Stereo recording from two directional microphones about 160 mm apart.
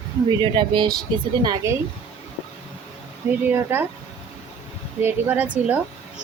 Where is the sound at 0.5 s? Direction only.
30° right (ahead or behind).